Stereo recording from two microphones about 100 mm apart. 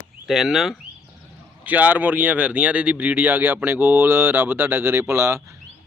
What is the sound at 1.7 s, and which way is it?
Speech, 15° right (ahead or behind).